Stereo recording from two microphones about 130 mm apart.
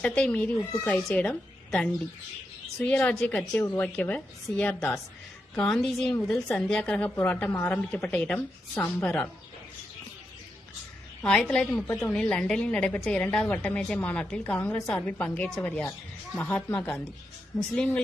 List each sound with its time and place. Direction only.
0.0 s a woman's voice: 10° left (ahead or behind)
5.5 s a woman's voice: 5° left (ahead or behind)
11.2 s a woman's voice: 10° left (ahead or behind)